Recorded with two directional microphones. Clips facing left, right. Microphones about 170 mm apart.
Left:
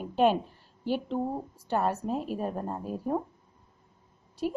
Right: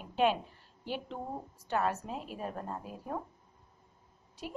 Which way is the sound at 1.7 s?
40° left (ahead or behind).